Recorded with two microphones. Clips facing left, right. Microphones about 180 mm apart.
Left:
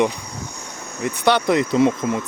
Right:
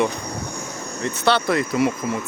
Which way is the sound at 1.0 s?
15° left (ahead or behind).